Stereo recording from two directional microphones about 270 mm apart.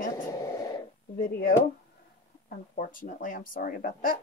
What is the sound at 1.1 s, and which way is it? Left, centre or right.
Speech, left.